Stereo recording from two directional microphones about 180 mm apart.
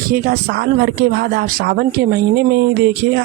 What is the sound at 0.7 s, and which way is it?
Speech, 60° right (ahead or behind).